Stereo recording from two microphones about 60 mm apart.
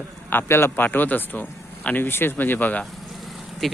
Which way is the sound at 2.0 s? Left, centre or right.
Left.